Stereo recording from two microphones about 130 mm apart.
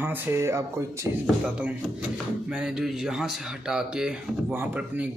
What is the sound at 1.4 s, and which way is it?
Speech, 10° right (ahead or behind).